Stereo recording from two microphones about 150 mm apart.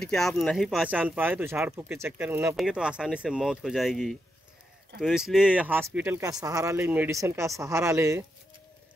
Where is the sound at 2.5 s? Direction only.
5° right (ahead or behind).